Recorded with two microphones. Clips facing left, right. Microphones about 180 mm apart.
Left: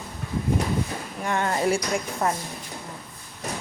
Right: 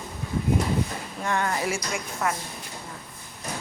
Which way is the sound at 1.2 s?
20° left (ahead or behind).